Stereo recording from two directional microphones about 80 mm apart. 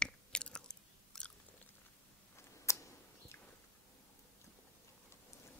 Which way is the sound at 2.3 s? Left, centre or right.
Left.